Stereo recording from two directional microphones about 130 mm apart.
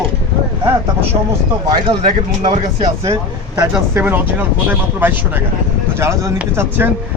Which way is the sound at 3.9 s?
15° right (ahead or behind).